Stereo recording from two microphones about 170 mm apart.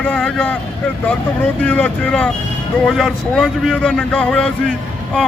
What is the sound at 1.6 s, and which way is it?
Speech, 10° left (ahead or behind).